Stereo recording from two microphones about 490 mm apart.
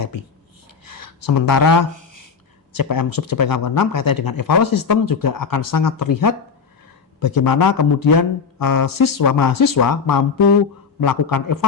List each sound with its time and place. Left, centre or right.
0.9 s gasp: left
2.7 s speech: left